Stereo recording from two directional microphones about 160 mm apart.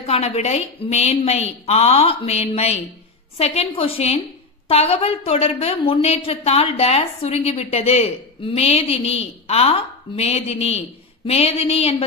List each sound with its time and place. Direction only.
0.0 s a woman's voice: 40° left (ahead or behind)